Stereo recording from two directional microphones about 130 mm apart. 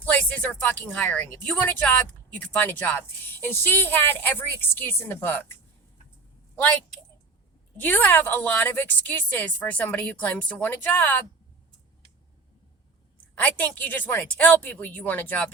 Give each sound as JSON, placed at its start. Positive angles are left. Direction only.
{"t": 0.0, "sound": "a woman's voice", "side_deg": 10}
{"t": 7.8, "sound": "a woman's voice", "side_deg": 15}
{"t": 13.3, "sound": "a woman's voice", "side_deg": 10}